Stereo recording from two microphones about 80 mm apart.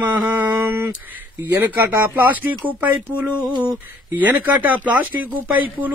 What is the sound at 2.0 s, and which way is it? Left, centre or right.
Speech, right.